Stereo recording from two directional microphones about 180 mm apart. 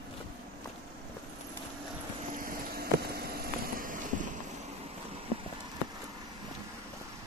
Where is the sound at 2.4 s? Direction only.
55° right (ahead or behind).